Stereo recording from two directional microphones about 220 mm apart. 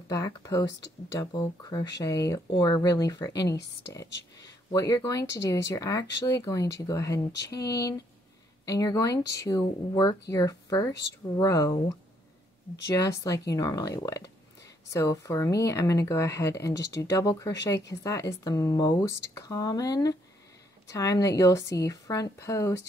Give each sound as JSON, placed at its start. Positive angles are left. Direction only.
{"t": 0.1, "sound": "speech", "side_deg": 15}